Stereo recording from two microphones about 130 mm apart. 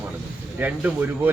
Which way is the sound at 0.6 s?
15° right (ahead or behind).